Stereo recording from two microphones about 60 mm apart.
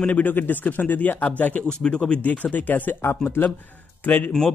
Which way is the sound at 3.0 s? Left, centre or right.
Left.